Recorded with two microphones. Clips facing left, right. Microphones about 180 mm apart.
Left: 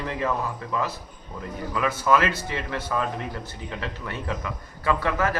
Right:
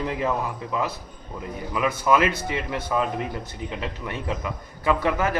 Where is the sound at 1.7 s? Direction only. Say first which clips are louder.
Right 1 dB; 15° right (ahead or behind).